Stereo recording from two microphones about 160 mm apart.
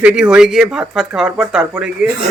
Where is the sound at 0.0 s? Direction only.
5° right (ahead or behind).